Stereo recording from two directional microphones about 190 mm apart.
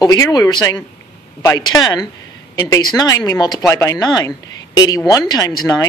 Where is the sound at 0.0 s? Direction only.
20° left (ahead or behind).